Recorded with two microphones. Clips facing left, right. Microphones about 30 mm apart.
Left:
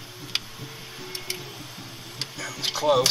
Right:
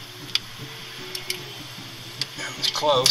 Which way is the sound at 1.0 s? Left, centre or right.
Centre.